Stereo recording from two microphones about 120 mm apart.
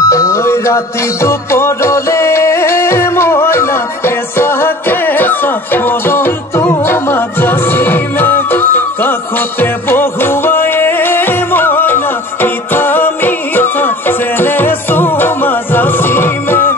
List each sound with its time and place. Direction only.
0.0 s music: 25° left (ahead or behind)